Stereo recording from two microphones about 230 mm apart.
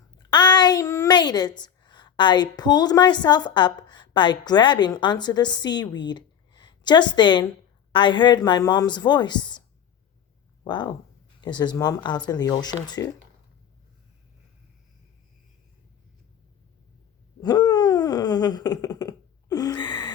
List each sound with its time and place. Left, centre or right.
0.2 s a woman's voice: centre
10.6 s speech: centre
17.4 s a sound: centre